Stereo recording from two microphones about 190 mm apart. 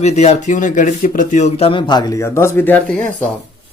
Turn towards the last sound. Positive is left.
turn(degrees=5)  # may be behind; listen again after turning